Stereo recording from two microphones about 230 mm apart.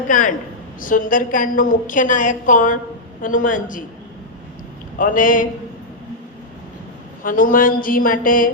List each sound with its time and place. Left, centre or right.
0.1 s a woman's voice: left
4.9 s a woman's voice: left
7.3 s a woman's voice: left